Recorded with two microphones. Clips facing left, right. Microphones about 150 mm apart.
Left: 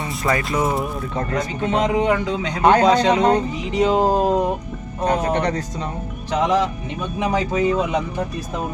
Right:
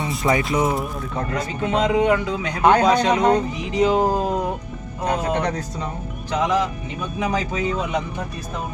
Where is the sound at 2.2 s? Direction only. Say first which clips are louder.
Left 1 dB; 20° left (ahead or behind).